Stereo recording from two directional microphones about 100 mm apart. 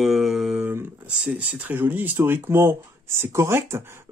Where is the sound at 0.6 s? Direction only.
15° right (ahead or behind).